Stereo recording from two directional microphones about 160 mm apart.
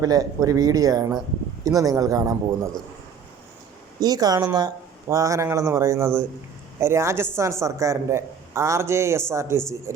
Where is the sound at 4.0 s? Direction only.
25° right (ahead or behind).